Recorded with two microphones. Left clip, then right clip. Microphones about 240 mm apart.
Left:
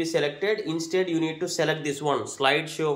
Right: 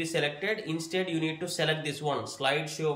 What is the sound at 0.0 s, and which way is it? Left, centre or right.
Speech, centre.